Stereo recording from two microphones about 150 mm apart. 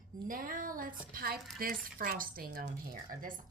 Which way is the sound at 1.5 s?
75° right (ahead or behind).